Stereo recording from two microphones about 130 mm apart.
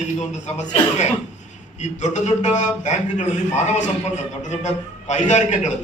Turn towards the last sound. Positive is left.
turn(degrees=65)  # may be behind; listen again after turning